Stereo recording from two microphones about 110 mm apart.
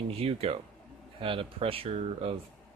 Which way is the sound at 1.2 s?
55° right (ahead or behind).